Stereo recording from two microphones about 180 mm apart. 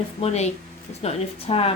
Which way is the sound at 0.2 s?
35° left (ahead or behind).